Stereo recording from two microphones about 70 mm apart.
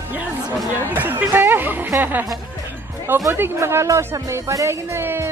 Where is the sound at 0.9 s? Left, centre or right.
Right.